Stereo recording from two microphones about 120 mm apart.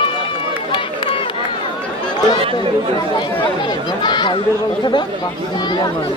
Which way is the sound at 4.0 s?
40° left (ahead or behind).